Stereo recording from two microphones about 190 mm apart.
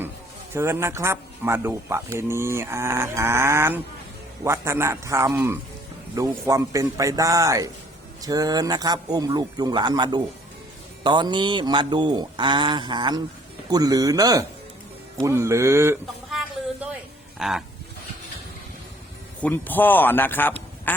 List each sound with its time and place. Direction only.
0.5 s speech: 15° right (ahead or behind)
17.4 s speech: centre (ahead or behind)
19.4 s a man's voice: 10° left (ahead or behind)